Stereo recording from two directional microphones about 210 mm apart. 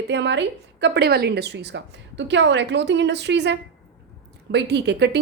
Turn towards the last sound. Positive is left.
turn(degrees=-55)  # may be behind; listen again after turning